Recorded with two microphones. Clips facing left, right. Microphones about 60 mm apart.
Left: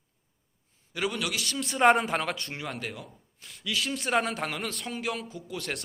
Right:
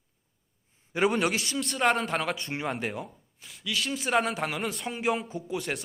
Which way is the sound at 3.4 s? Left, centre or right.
Centre.